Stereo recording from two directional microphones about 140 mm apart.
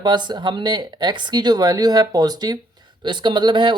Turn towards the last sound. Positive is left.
turn(degrees=-35)  # may be behind; listen again after turning